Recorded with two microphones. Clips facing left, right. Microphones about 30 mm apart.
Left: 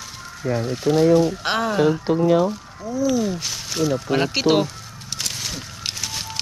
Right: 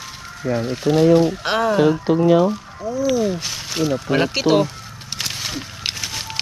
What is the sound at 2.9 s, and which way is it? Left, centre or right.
Speech, centre.